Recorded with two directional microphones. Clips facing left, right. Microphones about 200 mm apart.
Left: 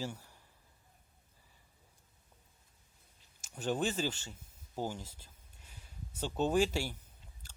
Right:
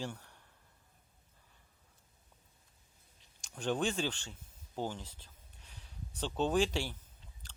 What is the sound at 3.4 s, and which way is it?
Speech, 5° left (ahead or behind).